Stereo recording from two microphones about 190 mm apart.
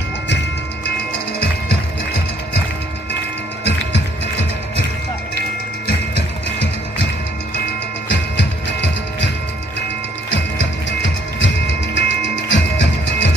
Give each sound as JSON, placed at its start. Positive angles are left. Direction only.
{"t": 3.6, "sound": "music", "side_deg": 70}
{"t": 8.1, "sound": "music", "side_deg": 70}
{"t": 10.3, "sound": "music", "side_deg": 75}